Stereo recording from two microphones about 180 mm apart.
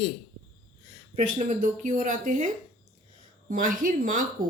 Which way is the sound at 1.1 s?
45° right (ahead or behind).